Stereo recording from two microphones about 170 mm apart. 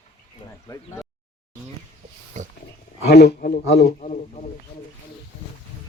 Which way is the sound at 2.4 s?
45° right (ahead or behind).